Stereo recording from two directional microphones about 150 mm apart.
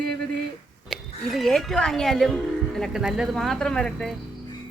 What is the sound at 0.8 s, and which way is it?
A woman's voice, centre (ahead or behind).